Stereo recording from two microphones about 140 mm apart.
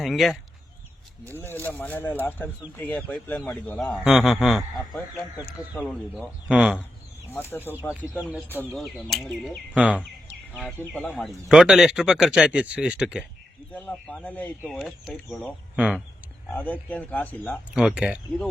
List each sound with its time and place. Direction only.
0.0 s speech: centre (ahead or behind)
1.2 s speech: 15° left (ahead or behind); by 6.7 s 5° right (ahead or behind)
7.3 s speech: 15° left (ahead or behind)
8.7 s speech: centre (ahead or behind)
9.7 s speech: 10° right (ahead or behind)
10.5 s speech: 5° left (ahead or behind)
13.7 s speech: 15° left (ahead or behind)
15.7 s speech: 5° right (ahead or behind)
16.6 s speech: 10° left (ahead or behind)
17.7 s speech: 5° right (ahead or behind)